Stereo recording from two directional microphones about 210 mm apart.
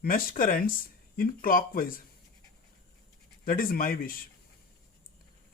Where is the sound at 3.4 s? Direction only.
45° left (ahead or behind).